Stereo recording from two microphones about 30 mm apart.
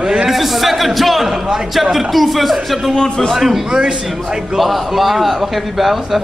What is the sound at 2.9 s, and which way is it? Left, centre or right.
Speech, left.